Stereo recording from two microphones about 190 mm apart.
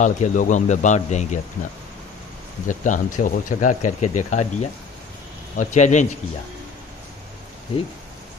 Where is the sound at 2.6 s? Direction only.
40° left (ahead or behind).